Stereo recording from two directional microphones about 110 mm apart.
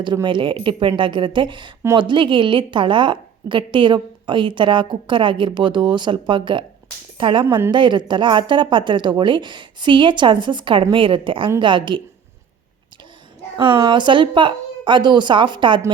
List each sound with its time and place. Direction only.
0.0 s a woman's voice: 45° right (ahead or behind)
13.6 s a woman's voice: 45° right (ahead or behind)